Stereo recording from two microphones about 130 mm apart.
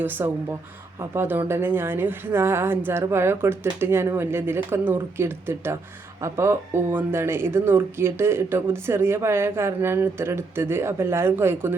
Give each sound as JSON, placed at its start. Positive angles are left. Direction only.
{"t": 0.0, "sound": "speech", "side_deg": -15}